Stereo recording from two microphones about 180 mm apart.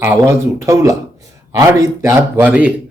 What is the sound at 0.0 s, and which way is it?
Speech, 15° right (ahead or behind).